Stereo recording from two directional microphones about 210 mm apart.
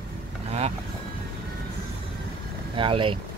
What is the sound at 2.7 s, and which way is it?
Speech, 25° right (ahead or behind).